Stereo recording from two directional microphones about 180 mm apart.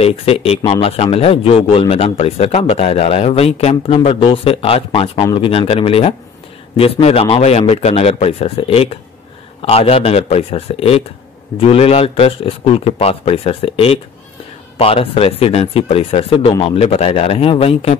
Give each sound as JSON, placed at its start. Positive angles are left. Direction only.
{"t": 0.0, "sound": "a man's voice", "side_deg": 30}